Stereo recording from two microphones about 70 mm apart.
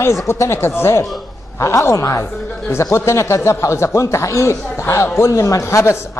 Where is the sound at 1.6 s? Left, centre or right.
Left.